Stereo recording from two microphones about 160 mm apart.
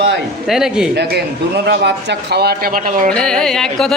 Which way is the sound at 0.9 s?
90° right.